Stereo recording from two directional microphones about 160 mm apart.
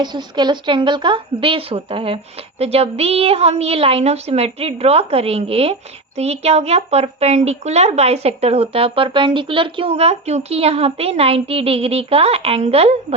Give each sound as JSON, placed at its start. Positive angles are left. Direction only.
{"t": 0.0, "sound": "speech", "side_deg": -25}